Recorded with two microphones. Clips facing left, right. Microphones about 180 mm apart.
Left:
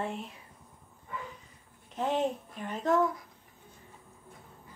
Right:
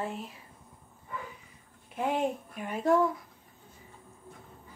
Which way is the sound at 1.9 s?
10° right (ahead or behind).